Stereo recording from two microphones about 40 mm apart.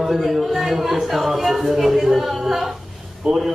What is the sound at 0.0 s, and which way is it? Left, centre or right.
A man's voice, centre.